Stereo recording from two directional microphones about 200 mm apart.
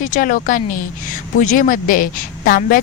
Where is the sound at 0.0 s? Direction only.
40° left (ahead or behind).